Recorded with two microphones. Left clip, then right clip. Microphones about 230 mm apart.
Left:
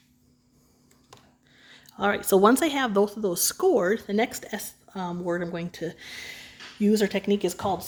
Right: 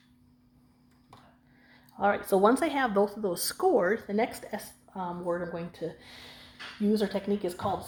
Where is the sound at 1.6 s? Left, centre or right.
Left.